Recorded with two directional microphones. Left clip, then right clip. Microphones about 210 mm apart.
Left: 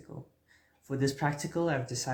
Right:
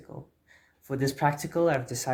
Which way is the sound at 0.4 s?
35° right (ahead or behind).